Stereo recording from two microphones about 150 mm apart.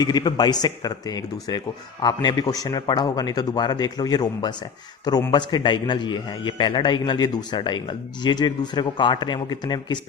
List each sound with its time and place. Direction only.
0.0 s a man's voice: 25° left (ahead or behind)